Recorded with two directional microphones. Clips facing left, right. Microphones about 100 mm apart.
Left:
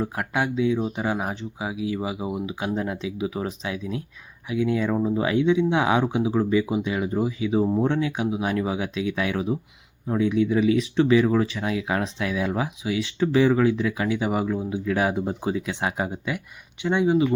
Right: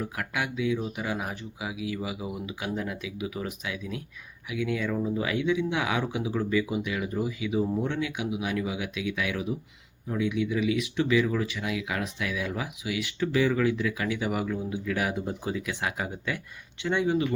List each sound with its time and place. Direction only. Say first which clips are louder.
0.0 s speech: left 6 dB; 30° left (ahead or behind)